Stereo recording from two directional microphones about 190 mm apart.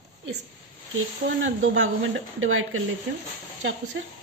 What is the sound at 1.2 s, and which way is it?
A woman's voice, 90° right.